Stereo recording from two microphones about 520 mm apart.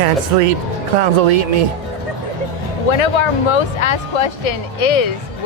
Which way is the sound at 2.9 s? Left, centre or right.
Left.